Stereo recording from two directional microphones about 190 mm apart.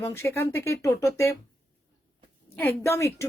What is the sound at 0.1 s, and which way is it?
A woman's voice, 15° left (ahead or behind).